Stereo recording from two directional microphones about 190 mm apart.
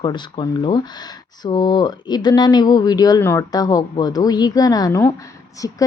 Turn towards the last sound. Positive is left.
turn(degrees=15)  # may be behind; listen again after turning